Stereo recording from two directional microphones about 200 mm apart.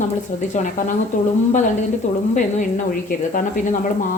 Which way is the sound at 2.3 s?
40° left (ahead or behind).